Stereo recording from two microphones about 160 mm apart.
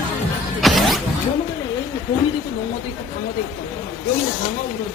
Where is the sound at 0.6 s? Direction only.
Centre (ahead or behind).